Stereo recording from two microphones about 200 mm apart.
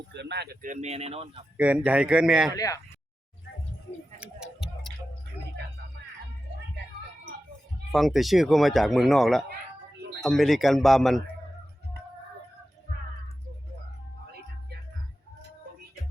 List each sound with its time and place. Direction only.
0.1 s speech: 60° right (ahead or behind)
0.6 s speech: 35° right (ahead or behind)
1.5 s speech: 5° right (ahead or behind)
2.6 s speech: 15° left (ahead or behind)
4.2 s tick-tock: centre (ahead or behind)
7.9 s speech: centre (ahead or behind)